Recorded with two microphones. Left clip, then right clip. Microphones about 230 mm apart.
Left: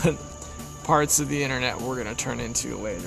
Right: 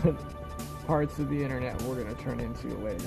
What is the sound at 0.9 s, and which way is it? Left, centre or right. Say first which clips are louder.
Speech: left 8 dB; left.